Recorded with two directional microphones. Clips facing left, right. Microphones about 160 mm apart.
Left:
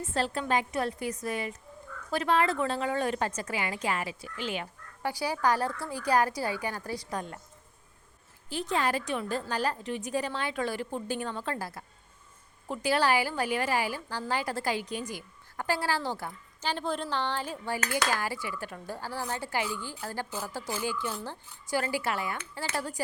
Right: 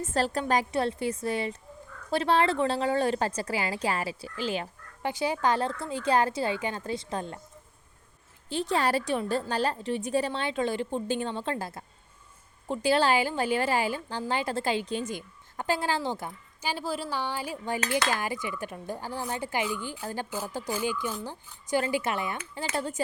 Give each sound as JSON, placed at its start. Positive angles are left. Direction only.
{"t": 0.0, "sound": "a woman's voice", "side_deg": -40}
{"t": 5.0, "sound": "a woman's voice", "side_deg": -20}
{"t": 8.4, "sound": "a woman's voice", "side_deg": -30}